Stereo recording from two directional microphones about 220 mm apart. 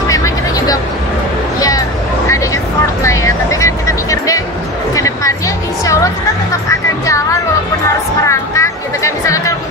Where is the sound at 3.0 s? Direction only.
15° left (ahead or behind).